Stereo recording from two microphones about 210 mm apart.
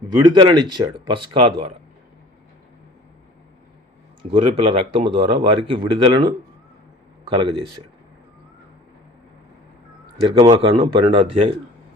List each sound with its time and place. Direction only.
0.2 s speech: 20° right (ahead or behind)
4.2 s speech: 25° right (ahead or behind)
10.4 s speech: 30° right (ahead or behind)